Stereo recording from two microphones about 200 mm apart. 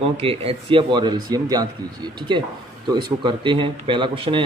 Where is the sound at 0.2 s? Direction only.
30° right (ahead or behind).